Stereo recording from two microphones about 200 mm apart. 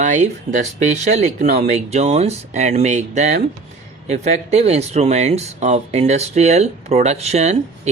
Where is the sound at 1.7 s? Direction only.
35° right (ahead or behind).